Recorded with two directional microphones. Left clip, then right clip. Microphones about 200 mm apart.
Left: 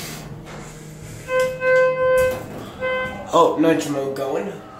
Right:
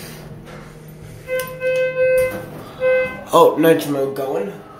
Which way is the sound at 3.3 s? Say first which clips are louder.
Right 4 dB; 20° right (ahead or behind).